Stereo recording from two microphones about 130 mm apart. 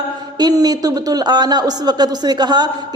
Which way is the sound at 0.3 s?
30° right (ahead or behind).